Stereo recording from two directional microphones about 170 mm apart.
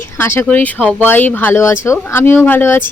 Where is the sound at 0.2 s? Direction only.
15° left (ahead or behind).